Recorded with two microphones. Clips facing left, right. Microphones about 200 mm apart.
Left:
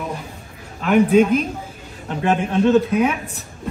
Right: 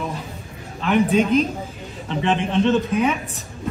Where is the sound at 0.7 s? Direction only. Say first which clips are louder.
Left 4 dB; 5° left (ahead or behind).